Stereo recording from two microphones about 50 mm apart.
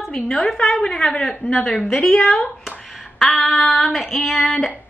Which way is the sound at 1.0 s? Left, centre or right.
Centre.